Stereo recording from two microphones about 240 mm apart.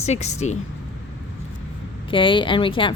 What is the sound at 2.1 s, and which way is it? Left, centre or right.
Speech, left.